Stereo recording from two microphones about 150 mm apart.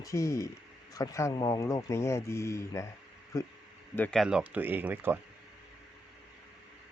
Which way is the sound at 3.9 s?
10° left (ahead or behind).